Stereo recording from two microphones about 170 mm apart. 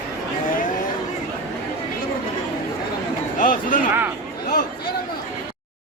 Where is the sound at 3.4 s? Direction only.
50° left (ahead or behind).